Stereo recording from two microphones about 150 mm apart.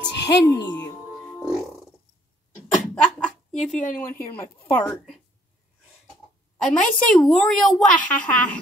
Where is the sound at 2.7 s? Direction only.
5° left (ahead or behind).